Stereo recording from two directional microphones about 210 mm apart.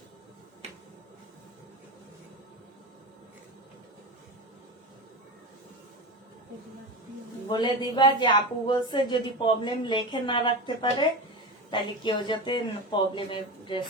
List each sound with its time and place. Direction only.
7.4 s speech: 20° left (ahead or behind)